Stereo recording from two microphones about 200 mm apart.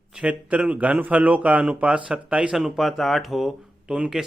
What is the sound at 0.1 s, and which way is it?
Speech, 5° right (ahead or behind).